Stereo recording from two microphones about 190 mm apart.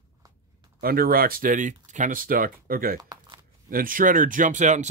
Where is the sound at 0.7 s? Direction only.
50° right (ahead or behind).